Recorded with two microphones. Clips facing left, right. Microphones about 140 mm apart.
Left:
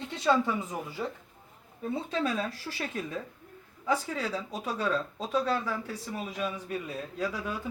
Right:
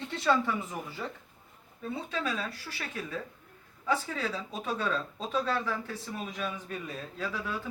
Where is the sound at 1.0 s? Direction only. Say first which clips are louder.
Left 4 dB; 25° left (ahead or behind).